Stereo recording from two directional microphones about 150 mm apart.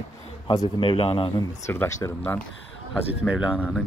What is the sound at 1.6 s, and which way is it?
Speech, 15° left (ahead or behind).